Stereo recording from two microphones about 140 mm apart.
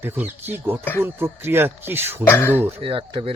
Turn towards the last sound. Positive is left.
turn(degrees=-40)  # may be behind; listen again after turning